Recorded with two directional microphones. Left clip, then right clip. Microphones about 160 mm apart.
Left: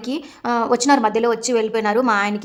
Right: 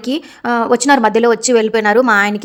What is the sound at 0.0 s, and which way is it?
A woman's voice, 30° right (ahead or behind).